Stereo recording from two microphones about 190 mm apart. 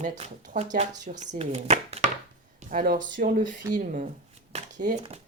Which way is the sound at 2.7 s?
50° right (ahead or behind).